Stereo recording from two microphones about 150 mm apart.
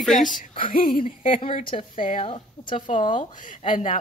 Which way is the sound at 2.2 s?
35° left (ahead or behind).